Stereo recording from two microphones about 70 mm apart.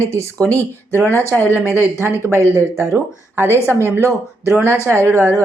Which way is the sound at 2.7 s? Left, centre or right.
Right.